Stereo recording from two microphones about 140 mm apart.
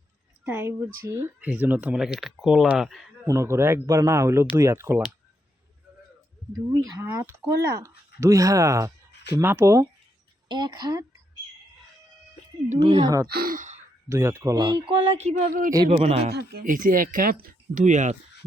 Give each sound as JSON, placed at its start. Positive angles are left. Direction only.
{"t": 0.4, "sound": "a woman's voice", "side_deg": -15}
{"t": 3.2, "sound": "speech", "side_deg": -20}
{"t": 6.7, "sound": "speech", "side_deg": -30}
{"t": 7.0, "sound": "speech", "side_deg": -20}
{"t": 12.8, "sound": "speech", "side_deg": -45}
{"t": 13.2, "sound": "speech", "side_deg": -90}
{"t": 14.1, "sound": "speech", "side_deg": -20}
{"t": 15.4, "sound": "speech", "side_deg": -70}
{"t": 15.9, "sound": "speech", "side_deg": -50}
{"t": 16.6, "sound": "speech", "side_deg": -75}